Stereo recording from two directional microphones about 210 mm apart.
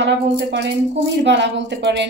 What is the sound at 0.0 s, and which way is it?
A woman's voice, 55° right (ahead or behind).